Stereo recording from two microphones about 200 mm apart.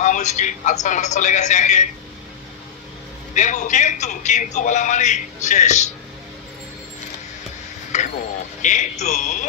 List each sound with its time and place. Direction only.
0.0 s a man's voice: 35° left (ahead or behind)
3.3 s a man's voice: 40° left (ahead or behind)
7.9 s a sound: 35° left (ahead or behind)
8.6 s a man's voice: 35° left (ahead or behind)